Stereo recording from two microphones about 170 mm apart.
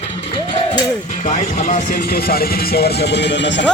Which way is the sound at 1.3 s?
45° left (ahead or behind).